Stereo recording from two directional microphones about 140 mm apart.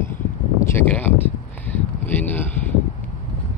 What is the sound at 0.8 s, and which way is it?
Speech, 10° left (ahead or behind).